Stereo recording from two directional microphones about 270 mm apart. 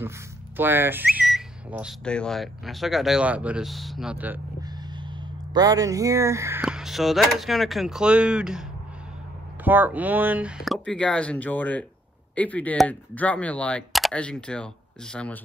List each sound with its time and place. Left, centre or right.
0.6 s speech: centre
9.7 s speech: centre